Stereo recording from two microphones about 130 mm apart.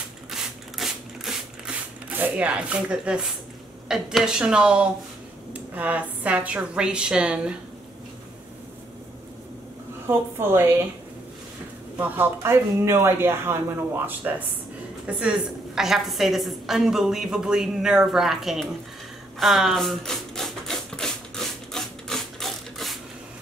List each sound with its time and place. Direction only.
0.3 s a sound: centre (ahead or behind)
3.9 s a woman's voice: 5° right (ahead or behind)
10.0 s a woman's voice: 15° right (ahead or behind)
12.0 s speech: 15° right (ahead or behind)
15.0 s a woman's voice: 5° right (ahead or behind)
19.4 s a sound: centre (ahead or behind)